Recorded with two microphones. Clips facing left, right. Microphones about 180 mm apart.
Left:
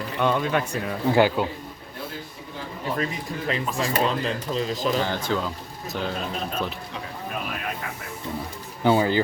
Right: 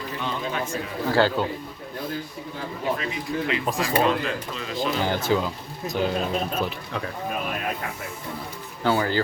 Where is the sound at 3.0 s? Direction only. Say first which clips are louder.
Right 1 dB; 40° left (ahead or behind).